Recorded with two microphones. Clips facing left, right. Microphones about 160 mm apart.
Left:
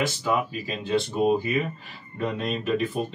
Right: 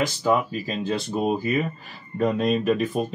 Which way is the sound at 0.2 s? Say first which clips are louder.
Right 4 dB; 40° right (ahead or behind).